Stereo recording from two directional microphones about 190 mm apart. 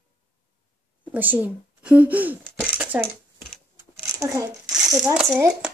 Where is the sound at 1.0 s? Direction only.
10° right (ahead or behind).